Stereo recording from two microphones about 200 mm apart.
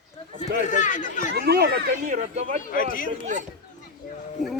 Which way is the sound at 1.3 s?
55° right (ahead or behind).